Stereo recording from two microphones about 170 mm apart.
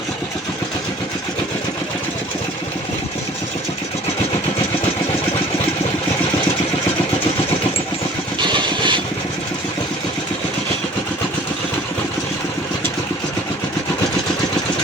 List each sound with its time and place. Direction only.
8.4 s vehicle: 25° right (ahead or behind)